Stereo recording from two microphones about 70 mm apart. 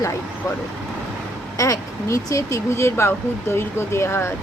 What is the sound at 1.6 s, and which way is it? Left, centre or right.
Speech, left.